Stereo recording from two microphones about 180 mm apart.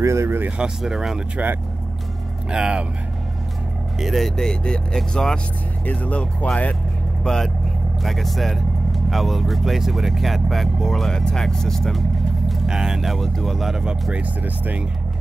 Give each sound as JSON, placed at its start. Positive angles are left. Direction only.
{"t": 0.0, "sound": "speech", "side_deg": -15}
{"t": 4.0, "sound": "speech", "side_deg": 0}